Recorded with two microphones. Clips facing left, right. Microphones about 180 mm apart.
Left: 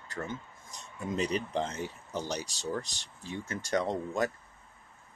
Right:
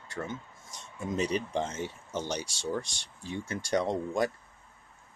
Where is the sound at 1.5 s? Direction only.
20° right (ahead or behind).